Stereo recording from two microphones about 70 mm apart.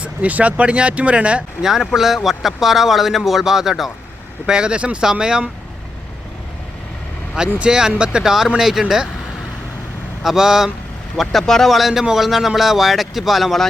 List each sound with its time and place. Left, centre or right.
0.0 s speech: right
1.6 s a man's voice: centre
7.3 s speech: centre
10.2 s a man's voice: centre